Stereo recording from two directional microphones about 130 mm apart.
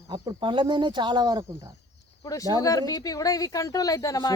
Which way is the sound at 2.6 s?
30° left (ahead or behind).